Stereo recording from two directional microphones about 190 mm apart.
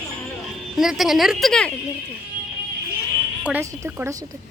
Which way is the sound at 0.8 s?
Centre (ahead or behind).